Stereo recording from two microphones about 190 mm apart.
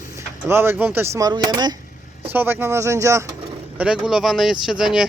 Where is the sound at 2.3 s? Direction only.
10° right (ahead or behind).